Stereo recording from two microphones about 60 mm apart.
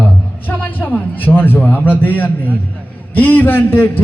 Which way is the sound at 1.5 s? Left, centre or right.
Left.